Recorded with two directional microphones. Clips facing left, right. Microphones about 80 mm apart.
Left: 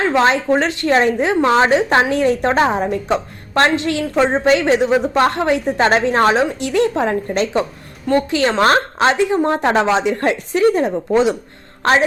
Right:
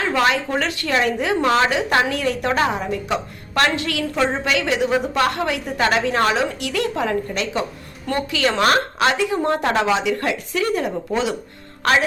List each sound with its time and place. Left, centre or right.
0.0 s a woman's voice: left